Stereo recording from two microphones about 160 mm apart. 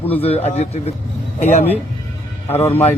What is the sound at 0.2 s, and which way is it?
Speech, 40° left (ahead or behind).